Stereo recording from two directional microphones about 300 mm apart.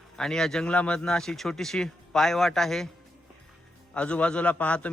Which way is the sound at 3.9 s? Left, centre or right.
Centre.